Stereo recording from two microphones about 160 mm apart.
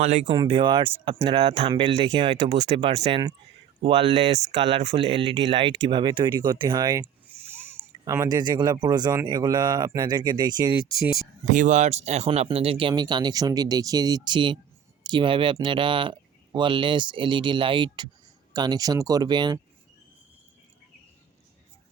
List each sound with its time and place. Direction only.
0.0 s speech: 45° right (ahead or behind)
0.3 s speech: 30° right (ahead or behind)
11.4 s speech: 55° right (ahead or behind); by 19.5 s 25° right (ahead or behind)